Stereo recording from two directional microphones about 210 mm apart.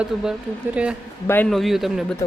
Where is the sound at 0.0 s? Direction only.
5° right (ahead or behind).